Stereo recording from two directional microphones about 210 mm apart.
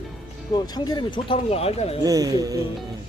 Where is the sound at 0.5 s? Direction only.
20° left (ahead or behind).